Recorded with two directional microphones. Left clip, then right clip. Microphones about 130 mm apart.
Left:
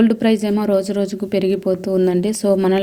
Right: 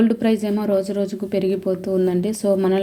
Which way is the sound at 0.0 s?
20° left (ahead or behind).